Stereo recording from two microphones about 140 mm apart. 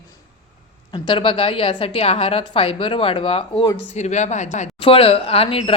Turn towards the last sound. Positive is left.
turn(degrees=40)  # may be behind; listen again after turning